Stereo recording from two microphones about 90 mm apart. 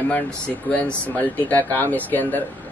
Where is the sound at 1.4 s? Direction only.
20° left (ahead or behind).